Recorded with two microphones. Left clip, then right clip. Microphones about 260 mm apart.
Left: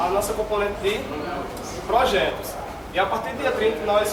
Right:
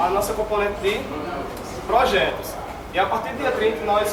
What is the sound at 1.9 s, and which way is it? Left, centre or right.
A man's voice, centre.